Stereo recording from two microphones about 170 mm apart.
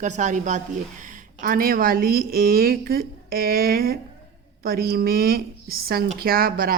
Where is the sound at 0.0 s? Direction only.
45° right (ahead or behind).